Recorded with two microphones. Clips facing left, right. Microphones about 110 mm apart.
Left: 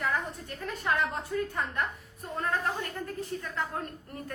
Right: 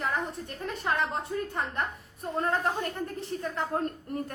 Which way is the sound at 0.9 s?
25° right (ahead or behind).